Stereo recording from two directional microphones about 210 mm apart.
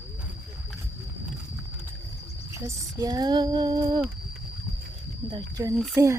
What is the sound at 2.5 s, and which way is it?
Female singing, 15° right (ahead or behind).